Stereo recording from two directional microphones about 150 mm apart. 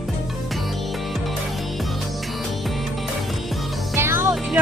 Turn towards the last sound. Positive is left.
turn(degrees=-15)  # may be behind; listen again after turning